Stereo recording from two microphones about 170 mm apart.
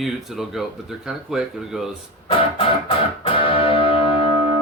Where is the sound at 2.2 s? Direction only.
30° left (ahead or behind).